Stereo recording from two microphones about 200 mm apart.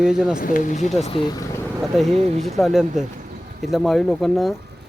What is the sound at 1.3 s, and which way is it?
Speech, 15° left (ahead or behind).